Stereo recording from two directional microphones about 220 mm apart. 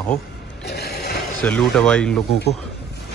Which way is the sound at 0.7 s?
45° left (ahead or behind).